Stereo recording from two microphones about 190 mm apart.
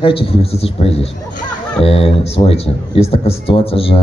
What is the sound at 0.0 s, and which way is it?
A man's voice, 30° left (ahead or behind).